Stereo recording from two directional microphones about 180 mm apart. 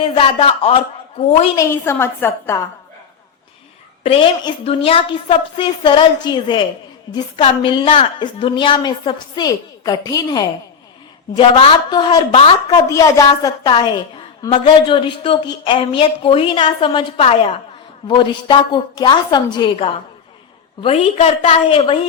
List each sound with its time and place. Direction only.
0.0 s a woman's voice: 30° left (ahead or behind)
1.5 s a woman's voice: 15° left (ahead or behind)
4.0 s a woman's voice: 30° left (ahead or behind)